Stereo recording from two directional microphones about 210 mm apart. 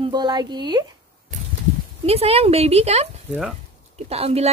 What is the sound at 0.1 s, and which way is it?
Speech, 20° right (ahead or behind).